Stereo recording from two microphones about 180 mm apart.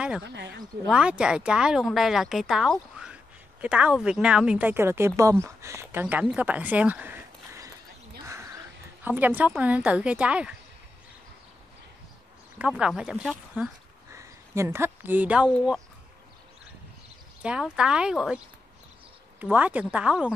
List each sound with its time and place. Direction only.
0.2 s speech: 70° right (ahead or behind)
0.8 s speech: 5° right (ahead or behind)
9.0 s speech: 10° right (ahead or behind)
12.5 s speech: 5° right (ahead or behind)
14.1 s speech: 15° right (ahead or behind)
17.4 s speech: 5° right (ahead or behind)
19.4 s speech: 10° right (ahead or behind)